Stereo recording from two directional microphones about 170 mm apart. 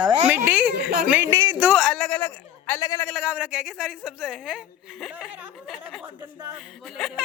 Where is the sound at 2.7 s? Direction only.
20° left (ahead or behind).